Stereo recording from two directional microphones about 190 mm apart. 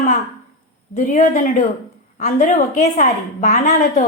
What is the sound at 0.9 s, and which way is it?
Speech, 40° left (ahead or behind).